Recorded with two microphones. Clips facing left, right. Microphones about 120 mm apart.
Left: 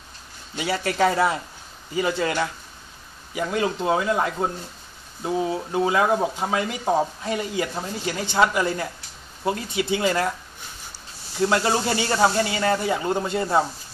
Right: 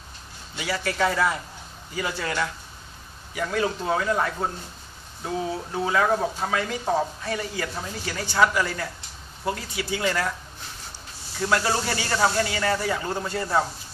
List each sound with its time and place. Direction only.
0.6 s speech: 25° left (ahead or behind)
11.4 s speech: 20° left (ahead or behind)